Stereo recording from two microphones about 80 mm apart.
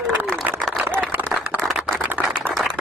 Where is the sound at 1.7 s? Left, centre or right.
Centre.